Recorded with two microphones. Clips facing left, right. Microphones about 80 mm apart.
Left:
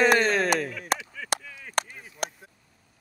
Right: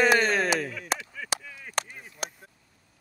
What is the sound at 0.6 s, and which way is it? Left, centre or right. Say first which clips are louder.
Chop: left 2 dB; centre.